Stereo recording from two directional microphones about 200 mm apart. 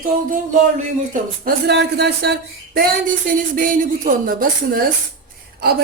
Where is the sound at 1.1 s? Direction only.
50° right (ahead or behind).